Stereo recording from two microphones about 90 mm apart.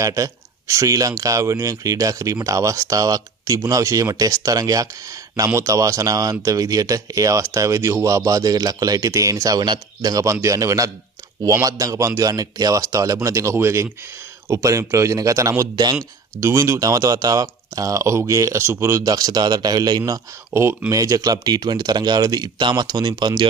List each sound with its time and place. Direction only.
0.0 s speech: 35° right (ahead or behind)
16.3 s speech: 30° right (ahead or behind)
19.1 s speech: 45° right (ahead or behind)